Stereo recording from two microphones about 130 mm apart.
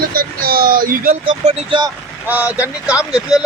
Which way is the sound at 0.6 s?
90° right.